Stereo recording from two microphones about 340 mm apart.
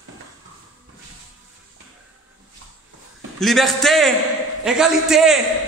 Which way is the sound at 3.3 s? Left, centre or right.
Centre.